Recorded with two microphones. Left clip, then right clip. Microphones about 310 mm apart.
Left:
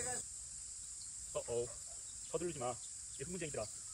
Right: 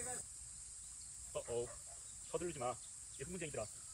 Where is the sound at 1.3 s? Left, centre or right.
Centre.